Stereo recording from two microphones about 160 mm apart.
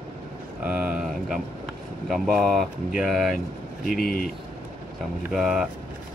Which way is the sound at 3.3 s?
60° left (ahead or behind).